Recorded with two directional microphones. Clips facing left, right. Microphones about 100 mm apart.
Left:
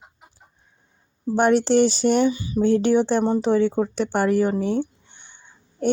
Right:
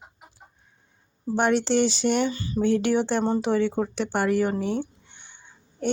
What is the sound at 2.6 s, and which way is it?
A woman's voice, 35° left (ahead or behind).